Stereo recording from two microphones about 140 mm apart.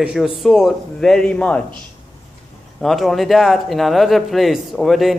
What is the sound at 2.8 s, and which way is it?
Speech, centre (ahead or behind).